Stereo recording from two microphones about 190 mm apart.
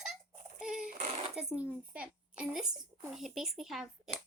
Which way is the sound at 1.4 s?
5° right (ahead or behind).